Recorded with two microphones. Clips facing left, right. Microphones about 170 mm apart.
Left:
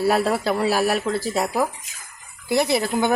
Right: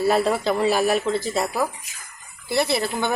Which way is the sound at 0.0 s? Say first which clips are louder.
Even; 10° left (ahead or behind).